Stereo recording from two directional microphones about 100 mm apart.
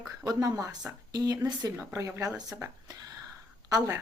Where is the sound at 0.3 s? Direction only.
35° right (ahead or behind).